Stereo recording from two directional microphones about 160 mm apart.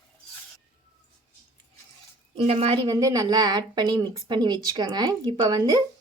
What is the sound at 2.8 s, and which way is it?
A woman's voice, 20° right (ahead or behind).